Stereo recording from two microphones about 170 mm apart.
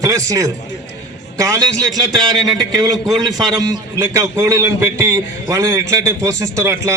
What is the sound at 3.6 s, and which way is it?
A man's voice, 20° right (ahead or behind).